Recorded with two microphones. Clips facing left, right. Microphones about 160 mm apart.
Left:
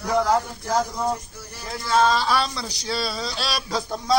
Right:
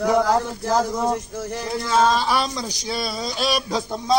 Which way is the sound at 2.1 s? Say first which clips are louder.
Right 1 dB; 15° right (ahead or behind).